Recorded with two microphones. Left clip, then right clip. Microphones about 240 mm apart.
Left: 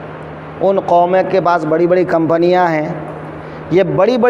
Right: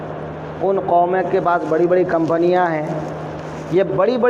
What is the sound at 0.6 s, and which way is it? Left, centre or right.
A man's voice, left.